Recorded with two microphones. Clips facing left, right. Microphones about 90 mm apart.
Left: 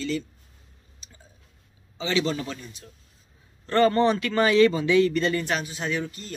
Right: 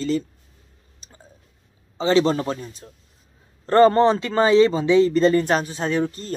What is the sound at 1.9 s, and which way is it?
Speech, 35° right (ahead or behind).